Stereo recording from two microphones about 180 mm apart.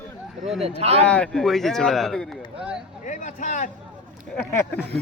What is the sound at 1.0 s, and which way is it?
Speech, 5° left (ahead or behind).